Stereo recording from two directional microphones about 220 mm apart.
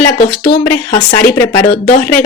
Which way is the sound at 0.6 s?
15° left (ahead or behind).